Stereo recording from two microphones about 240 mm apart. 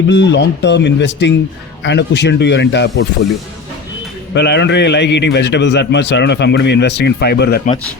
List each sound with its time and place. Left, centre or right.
0.1 s a man's voice: left
4.4 s a man's voice: left